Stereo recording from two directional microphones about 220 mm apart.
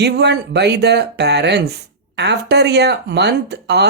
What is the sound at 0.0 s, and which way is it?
Speech, 50° right (ahead or behind).